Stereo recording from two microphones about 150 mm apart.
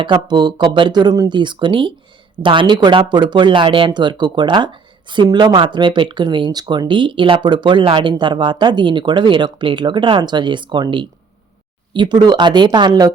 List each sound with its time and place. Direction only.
0.0 s speech: 30° right (ahead or behind)